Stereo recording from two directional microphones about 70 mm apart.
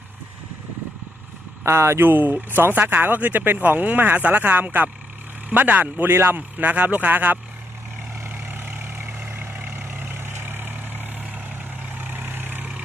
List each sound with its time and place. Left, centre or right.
1.6 s speech: right
8.2 s vehicle: right